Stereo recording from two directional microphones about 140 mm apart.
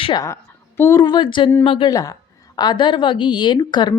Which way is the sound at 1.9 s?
25° left (ahead or behind).